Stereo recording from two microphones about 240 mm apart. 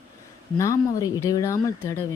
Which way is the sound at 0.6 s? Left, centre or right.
Centre.